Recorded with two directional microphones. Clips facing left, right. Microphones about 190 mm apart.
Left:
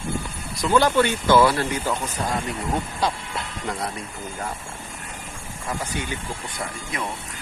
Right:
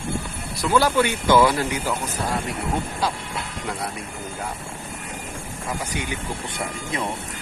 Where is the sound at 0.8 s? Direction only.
10° right (ahead or behind).